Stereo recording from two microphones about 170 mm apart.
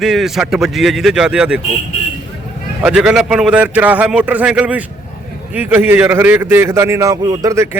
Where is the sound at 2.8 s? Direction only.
5° right (ahead or behind).